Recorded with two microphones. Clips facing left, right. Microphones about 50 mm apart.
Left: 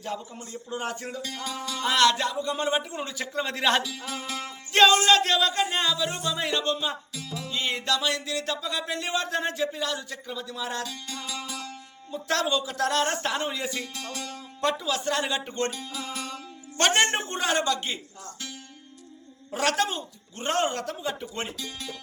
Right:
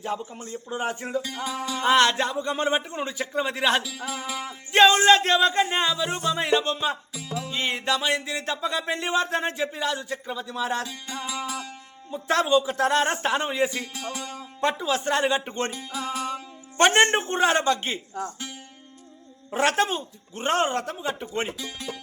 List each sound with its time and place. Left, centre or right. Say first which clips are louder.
0.0 s speech: right 4 dB; right
1.8 s speech: right 2 dB; right; by 4.5 s centre
4.7 s music: right 2 dB; right
5.6 s speech: right 2 dB; centre
6.1 s music: right 4 dB; centre
6.4 s music: right 3 dB; right
15.8 s speech: right 5 dB; centre
18.2 s music: right 7 dB; right